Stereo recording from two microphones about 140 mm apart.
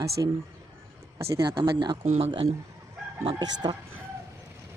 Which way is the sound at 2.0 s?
50° right (ahead or behind).